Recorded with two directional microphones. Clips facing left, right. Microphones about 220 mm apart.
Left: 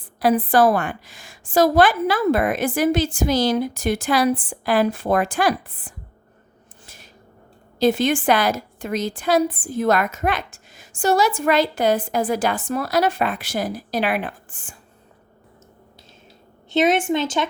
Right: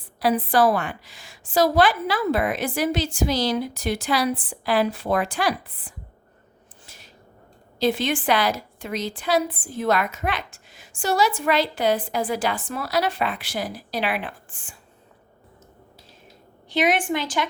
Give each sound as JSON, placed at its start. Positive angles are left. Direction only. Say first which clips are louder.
{"t": 0.2, "sound": "a woman's voice", "louder": "left 3 dB", "side_deg": 50}
{"t": 6.8, "sound": "a sound", "louder": "left 3 dB", "side_deg": 50}
{"t": 7.8, "sound": "a woman's voice", "louder": "left 4 dB", "side_deg": 45}
{"t": 16.6, "sound": "a woman's voice", "louder": "left 4 dB", "side_deg": 25}